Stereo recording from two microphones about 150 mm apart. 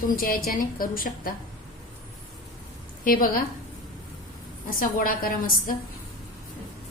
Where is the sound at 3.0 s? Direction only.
65° left (ahead or behind).